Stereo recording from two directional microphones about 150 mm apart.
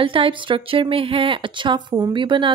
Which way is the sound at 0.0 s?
35° right (ahead or behind).